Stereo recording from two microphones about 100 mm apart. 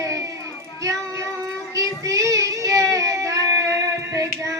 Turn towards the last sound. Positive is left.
turn(degrees=-30)  # may be behind; listen again after turning